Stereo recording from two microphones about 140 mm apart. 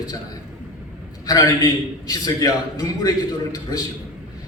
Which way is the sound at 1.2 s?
25° left (ahead or behind).